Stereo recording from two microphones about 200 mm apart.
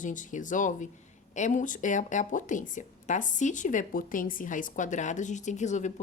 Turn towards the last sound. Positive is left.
turn(degrees=35)  # may be behind; listen again after turning